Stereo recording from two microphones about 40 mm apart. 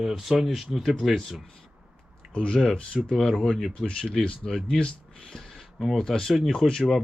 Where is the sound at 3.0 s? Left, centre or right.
Centre.